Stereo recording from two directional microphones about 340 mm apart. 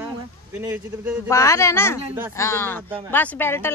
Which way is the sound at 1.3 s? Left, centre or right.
Centre.